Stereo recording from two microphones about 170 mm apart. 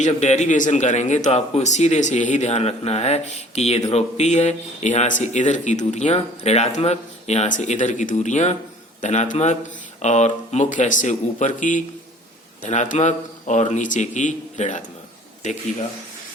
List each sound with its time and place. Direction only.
0.0 s speech: 45° left (ahead or behind)